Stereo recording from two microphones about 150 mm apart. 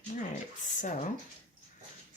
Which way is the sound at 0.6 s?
55° left (ahead or behind).